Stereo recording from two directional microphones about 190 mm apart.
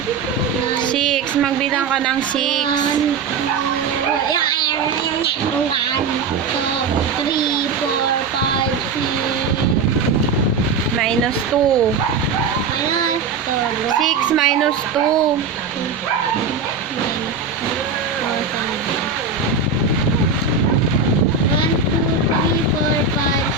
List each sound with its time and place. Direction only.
0.9 s speech: centre (ahead or behind)
14.0 s a child's voice: centre (ahead or behind)